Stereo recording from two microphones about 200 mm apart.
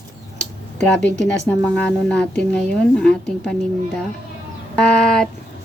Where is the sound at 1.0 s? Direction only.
60° left (ahead or behind).